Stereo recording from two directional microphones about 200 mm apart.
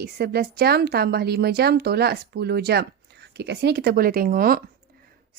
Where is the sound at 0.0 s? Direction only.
50° right (ahead or behind).